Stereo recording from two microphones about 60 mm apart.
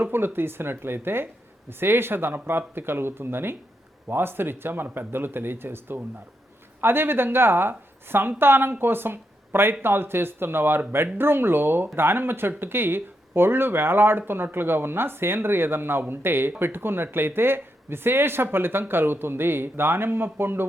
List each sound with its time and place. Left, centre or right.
0.0 s speech: right